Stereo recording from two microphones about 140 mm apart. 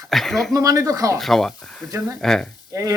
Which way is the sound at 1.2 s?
Centre (ahead or behind).